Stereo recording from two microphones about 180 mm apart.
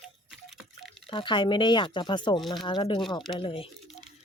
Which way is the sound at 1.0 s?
30° left (ahead or behind).